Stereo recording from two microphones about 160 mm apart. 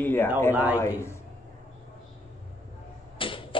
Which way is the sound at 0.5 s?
10° right (ahead or behind).